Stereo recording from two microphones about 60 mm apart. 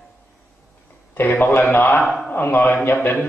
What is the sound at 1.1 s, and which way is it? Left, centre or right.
Speech, left.